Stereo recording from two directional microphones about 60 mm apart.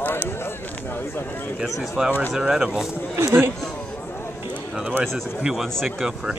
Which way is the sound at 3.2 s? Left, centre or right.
Right.